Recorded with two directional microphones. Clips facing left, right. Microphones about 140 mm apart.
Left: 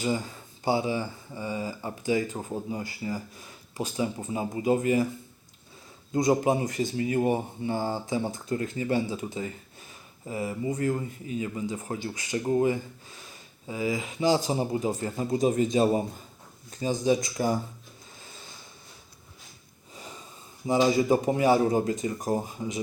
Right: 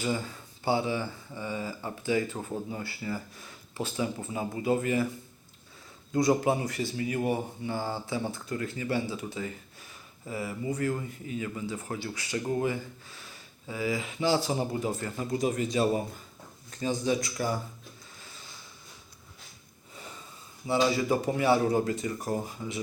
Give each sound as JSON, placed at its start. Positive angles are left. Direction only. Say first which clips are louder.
{"t": 0.6, "sound": "speech", "louder": "left 2 dB", "side_deg": 15}
{"t": 6.1, "sound": "speech", "louder": "left 1 dB", "side_deg": 20}
{"t": 20.7, "sound": "speech", "louder": "left 4 dB", "side_deg": 20}